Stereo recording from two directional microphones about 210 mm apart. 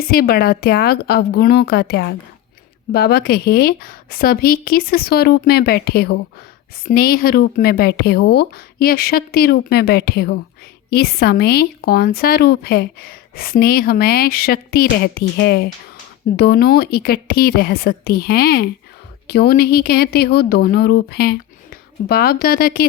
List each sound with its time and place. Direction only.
0.0 s speech: 45° left (ahead or behind)